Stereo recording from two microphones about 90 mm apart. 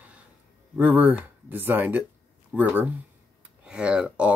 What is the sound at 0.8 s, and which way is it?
Speech, 20° right (ahead or behind).